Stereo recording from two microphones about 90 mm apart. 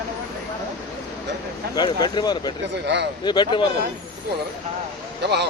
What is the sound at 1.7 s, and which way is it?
Speech, 50° left (ahead or behind).